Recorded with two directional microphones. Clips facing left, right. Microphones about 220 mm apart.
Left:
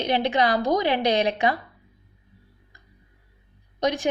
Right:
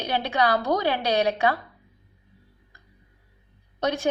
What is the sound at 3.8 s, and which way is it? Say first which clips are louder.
Speech: left 2 dB; 15° left (ahead or behind).